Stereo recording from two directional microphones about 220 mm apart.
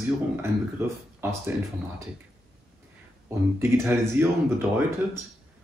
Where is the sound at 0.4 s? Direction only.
10° right (ahead or behind).